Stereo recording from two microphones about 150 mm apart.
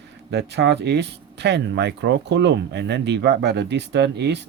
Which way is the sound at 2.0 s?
90° right.